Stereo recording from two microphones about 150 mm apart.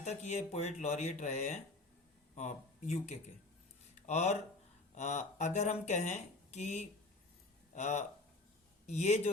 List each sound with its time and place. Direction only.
0.0 s a man's voice: 50° left (ahead or behind)